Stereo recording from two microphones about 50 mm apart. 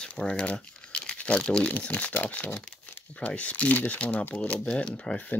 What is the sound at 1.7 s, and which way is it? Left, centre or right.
Speech, left.